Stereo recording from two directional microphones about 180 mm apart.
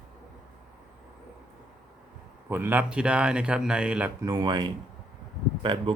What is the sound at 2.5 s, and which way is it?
Speech, 10° right (ahead or behind).